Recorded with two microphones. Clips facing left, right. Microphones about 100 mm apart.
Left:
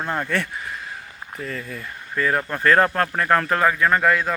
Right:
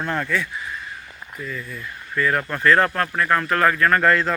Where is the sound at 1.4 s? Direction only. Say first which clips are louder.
Left 1 dB; 60° left (ahead or behind).